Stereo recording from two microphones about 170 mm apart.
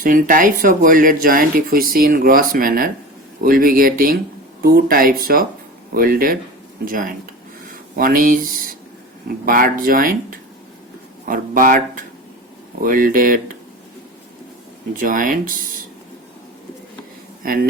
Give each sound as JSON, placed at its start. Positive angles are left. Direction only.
{"t": 0.0, "sound": "speech", "side_deg": -55}
{"t": 14.9, "sound": "speech", "side_deg": -55}
{"t": 17.4, "sound": "speech", "side_deg": -60}